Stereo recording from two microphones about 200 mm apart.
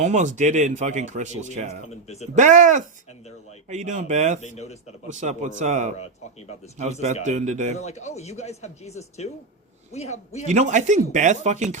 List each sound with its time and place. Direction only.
0.0 s speech: 35° right (ahead or behind)
1.9 s speech: 35° left (ahead or behind)
2.3 s speech: 40° right (ahead or behind)
4.4 s speech: 35° left (ahead or behind)
5.0 s speech: 35° right (ahead or behind)
7.3 s speech: 35° right (ahead or behind)
7.8 s speech: 35° left (ahead or behind)
10.4 s speech: 35° right (ahead or behind)